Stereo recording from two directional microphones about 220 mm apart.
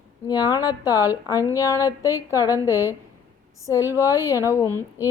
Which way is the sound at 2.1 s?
15° left (ahead or behind).